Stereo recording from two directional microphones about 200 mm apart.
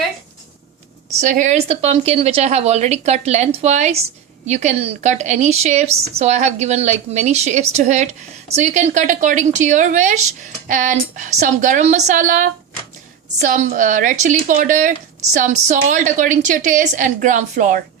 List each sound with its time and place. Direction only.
1.2 s speech: 40° right (ahead or behind)